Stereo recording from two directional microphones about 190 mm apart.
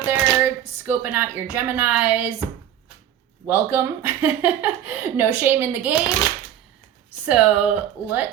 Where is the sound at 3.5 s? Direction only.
10° right (ahead or behind).